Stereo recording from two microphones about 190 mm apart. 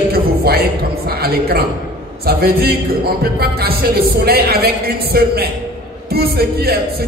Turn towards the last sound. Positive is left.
turn(degrees=-55)  # may be behind; listen again after turning